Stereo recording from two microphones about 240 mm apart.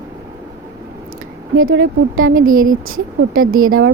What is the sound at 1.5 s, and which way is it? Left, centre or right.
A woman's voice, right.